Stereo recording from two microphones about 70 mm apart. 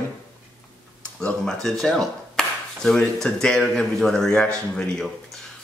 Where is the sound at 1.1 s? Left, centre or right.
Centre.